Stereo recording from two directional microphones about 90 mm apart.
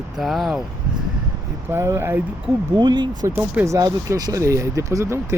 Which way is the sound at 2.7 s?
55° right (ahead or behind).